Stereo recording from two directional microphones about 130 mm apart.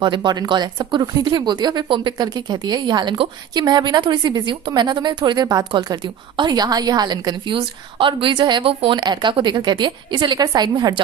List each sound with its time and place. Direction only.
0.0 s speech: 35° right (ahead or behind)